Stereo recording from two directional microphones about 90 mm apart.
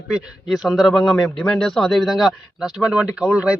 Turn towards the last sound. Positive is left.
turn(degrees=-10)  # may be behind; listen again after turning